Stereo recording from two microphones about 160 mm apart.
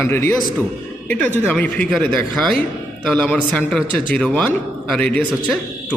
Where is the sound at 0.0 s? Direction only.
15° left (ahead or behind).